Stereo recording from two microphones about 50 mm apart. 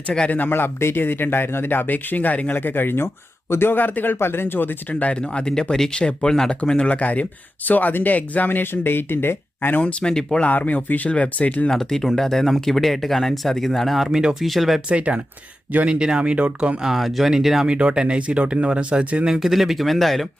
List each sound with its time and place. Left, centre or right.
0.3 s a man's voice: left
2.6 s a man's voice: left
9.8 s speech: centre
10.4 s speech: left
11.7 s speech: centre
14.8 s speech: right
16.8 s speech: centre
17.7 s speech: right; by 20.2 s centre